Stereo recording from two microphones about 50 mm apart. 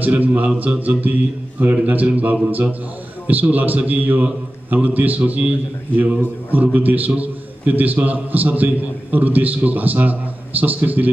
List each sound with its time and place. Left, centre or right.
0.0 s a man's voice: right
6.5 s a man's voice: right